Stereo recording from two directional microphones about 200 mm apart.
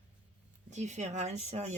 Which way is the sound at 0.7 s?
35° right (ahead or behind).